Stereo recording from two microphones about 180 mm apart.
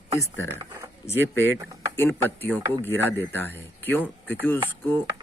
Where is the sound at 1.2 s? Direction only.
90° right.